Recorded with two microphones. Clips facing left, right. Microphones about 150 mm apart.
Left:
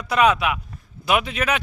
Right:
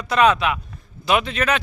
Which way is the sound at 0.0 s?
10° left (ahead or behind).